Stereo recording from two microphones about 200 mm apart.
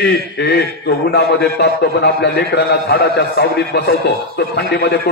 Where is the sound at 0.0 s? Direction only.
55° left (ahead or behind).